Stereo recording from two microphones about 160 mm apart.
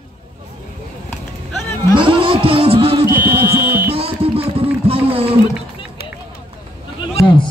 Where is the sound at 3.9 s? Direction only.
35° right (ahead or behind).